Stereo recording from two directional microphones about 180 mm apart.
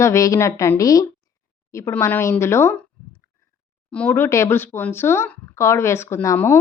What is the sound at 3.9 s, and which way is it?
Speech, 10° left (ahead or behind).